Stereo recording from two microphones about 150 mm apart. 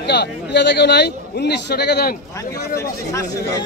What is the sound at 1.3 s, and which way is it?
Speech, 90° left.